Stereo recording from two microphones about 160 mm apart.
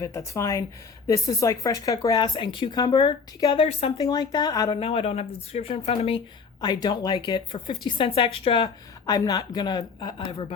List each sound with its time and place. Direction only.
0.0 s speech: 20° left (ahead or behind); by 3.9 s 40° left (ahead or behind)
3.9 s speech: 25° left (ahead or behind)
4.8 s speech: 35° left (ahead or behind)
6.6 s speech: 25° left (ahead or behind)